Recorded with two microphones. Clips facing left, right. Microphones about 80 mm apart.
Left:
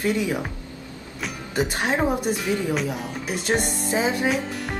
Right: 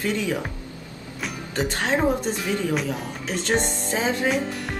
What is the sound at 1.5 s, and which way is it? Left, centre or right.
A woman's voice, centre.